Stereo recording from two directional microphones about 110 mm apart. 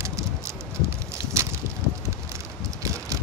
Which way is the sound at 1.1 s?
25° right (ahead or behind).